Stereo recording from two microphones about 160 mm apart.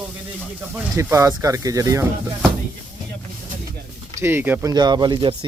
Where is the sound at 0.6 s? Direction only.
10° right (ahead or behind).